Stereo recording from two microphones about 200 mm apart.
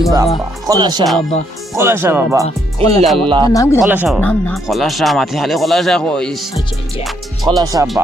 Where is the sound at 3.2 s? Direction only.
25° right (ahead or behind).